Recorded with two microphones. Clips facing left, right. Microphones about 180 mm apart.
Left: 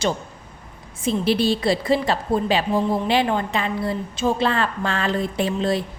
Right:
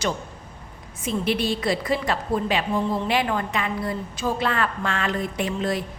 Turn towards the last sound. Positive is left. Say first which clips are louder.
# left 4 dB
turn(degrees=30)  # may be behind; listen again after turning